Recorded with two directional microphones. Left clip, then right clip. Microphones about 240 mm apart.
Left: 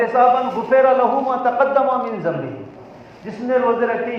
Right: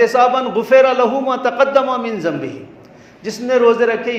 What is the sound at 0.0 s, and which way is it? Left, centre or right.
A man's voice, right.